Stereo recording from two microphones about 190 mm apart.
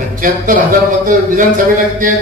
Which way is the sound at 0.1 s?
45° right (ahead or behind).